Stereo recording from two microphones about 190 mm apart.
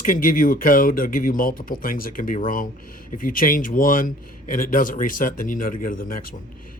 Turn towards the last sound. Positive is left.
turn(degrees=50)  # may be behind; listen again after turning